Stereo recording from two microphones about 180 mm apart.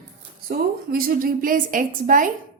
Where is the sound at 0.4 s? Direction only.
55° right (ahead or behind).